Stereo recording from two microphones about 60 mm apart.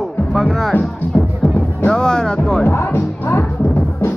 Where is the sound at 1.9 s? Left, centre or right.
Centre.